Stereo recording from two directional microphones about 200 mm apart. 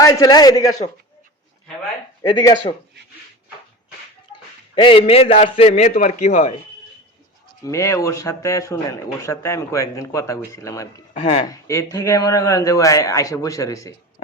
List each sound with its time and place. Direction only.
0.0 s a man's voice: 15° left (ahead or behind)
2.2 s a man's voice: 20° left (ahead or behind)
4.7 s a man's voice: 25° left (ahead or behind)
7.6 s a man's voice: 15° left (ahead or behind)
11.2 s a man's voice: 30° left (ahead or behind)
11.4 s a man's voice: 15° left (ahead or behind)